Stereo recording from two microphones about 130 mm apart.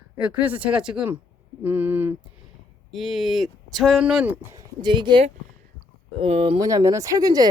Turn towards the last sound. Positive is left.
turn(degrees=-30)  # may be behind; listen again after turning